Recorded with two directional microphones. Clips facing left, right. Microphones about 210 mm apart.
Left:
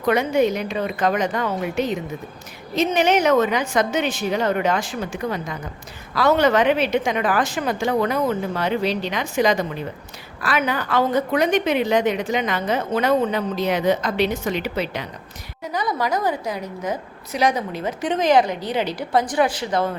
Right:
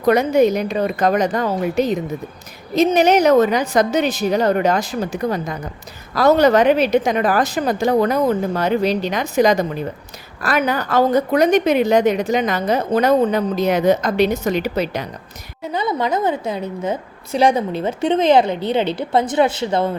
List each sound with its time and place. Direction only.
0.0 s a woman's voice: 40° right (ahead or behind)
15.7 s a woman's voice: 25° right (ahead or behind)